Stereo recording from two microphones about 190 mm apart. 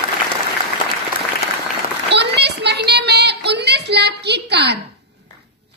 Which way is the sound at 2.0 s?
65° right (ahead or behind).